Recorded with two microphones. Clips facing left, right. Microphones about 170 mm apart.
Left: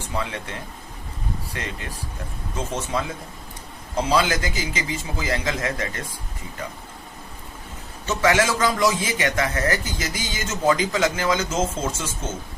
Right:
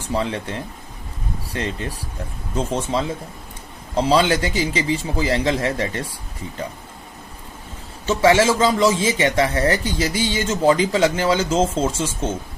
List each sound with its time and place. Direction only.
0.2 s a man's voice: 35° right (ahead or behind)
1.5 s a man's voice: 35° right (ahead or behind)
8.0 s a man's voice: 30° right (ahead or behind)